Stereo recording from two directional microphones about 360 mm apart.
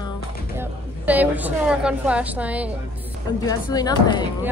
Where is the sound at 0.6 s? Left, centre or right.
Centre.